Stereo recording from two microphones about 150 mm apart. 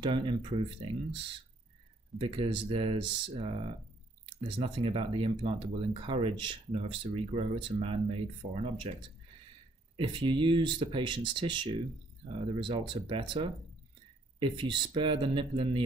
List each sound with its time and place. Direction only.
0.0 s speech: 35° right (ahead or behind)
9.9 s speech: 35° right (ahead or behind)